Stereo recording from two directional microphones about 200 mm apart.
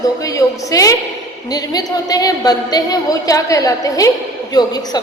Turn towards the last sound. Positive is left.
turn(degrees=20)  # may be behind; listen again after turning